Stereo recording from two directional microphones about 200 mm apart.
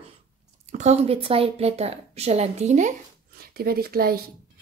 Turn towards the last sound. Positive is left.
turn(degrees=-50)  # may be behind; listen again after turning